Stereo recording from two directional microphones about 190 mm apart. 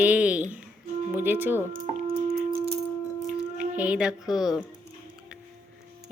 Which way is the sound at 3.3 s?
45° right (ahead or behind).